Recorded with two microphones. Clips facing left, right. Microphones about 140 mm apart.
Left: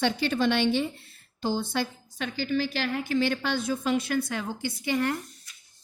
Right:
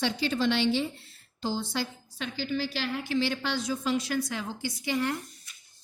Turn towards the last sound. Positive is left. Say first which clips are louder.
# left 2 dB
turn(degrees=55)  # may be behind; listen again after turning